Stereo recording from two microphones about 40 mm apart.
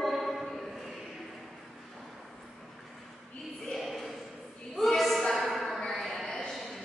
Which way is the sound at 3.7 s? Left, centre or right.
Centre.